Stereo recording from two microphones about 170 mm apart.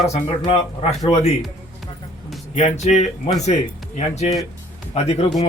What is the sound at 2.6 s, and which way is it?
Speech, 40° left (ahead or behind).